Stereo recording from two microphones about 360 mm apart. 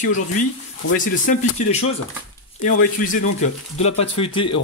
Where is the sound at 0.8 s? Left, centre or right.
Left.